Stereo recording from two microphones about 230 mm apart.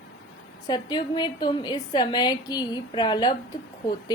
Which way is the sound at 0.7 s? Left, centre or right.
Centre.